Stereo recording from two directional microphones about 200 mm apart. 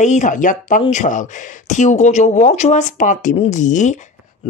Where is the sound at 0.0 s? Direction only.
35° left (ahead or behind).